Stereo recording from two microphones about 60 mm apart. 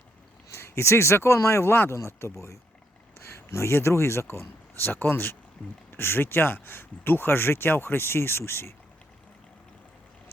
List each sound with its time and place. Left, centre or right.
0.5 s speech: left